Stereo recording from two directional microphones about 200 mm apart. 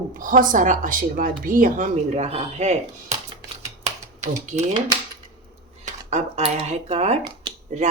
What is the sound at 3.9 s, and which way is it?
Typing, 35° right (ahead or behind).